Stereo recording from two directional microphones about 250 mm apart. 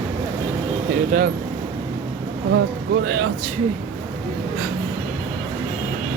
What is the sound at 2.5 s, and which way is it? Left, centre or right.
Speech, right.